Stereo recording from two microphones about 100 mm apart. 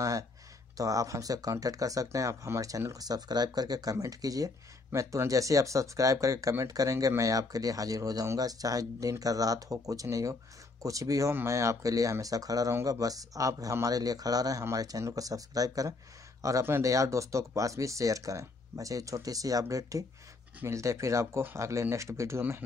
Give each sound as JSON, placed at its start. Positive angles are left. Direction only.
{"t": 0.7, "sound": "speech", "side_deg": -35}